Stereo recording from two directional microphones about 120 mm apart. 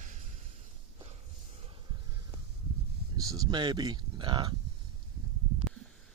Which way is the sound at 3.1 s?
30° right (ahead or behind).